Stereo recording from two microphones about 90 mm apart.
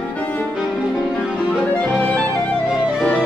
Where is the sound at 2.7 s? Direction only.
10° right (ahead or behind).